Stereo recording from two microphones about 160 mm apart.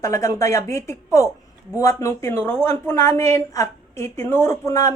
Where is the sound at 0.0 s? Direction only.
20° left (ahead or behind).